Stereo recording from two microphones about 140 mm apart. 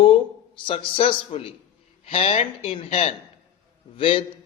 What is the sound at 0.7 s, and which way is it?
A man's voice, 40° left (ahead or behind).